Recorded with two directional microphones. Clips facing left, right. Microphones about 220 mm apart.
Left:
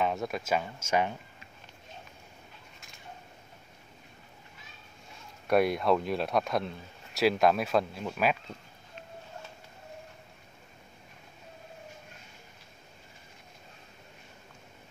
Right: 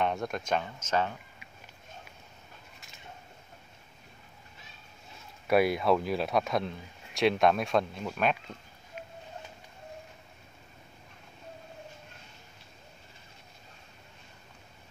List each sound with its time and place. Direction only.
0.0 s speech: centre (ahead or behind)
5.5 s speech: centre (ahead or behind)